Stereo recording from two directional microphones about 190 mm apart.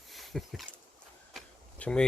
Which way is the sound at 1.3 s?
5° left (ahead or behind).